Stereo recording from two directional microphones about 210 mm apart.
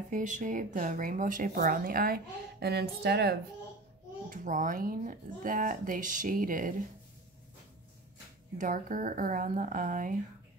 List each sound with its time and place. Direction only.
0.1 s speech: 35° right (ahead or behind)
4.3 s speech: 40° right (ahead or behind)
8.5 s speech: 40° right (ahead or behind)